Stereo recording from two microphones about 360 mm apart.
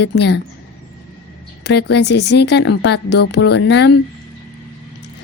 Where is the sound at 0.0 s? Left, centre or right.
Left.